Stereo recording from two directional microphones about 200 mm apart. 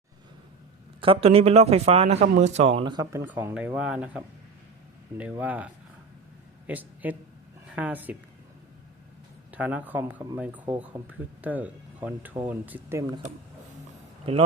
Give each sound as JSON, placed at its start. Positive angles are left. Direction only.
{"t": 1.0, "sound": "speech", "side_deg": -30}
{"t": 9.5, "sound": "speech", "side_deg": -5}